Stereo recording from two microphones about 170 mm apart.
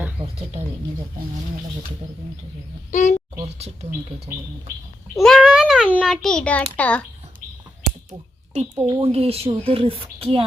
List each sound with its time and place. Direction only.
0.2 s a sound: 35° right (ahead or behind)
2.9 s speech: 45° left (ahead or behind)
3.4 s speech: 40° right (ahead or behind)
5.1 s a child's voice: centre (ahead or behind)
8.5 s speech: 40° right (ahead or behind)